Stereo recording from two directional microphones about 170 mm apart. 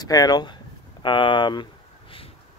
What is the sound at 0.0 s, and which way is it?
Speech, 20° left (ahead or behind).